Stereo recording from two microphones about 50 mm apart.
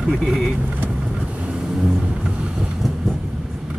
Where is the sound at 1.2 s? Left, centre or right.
Right.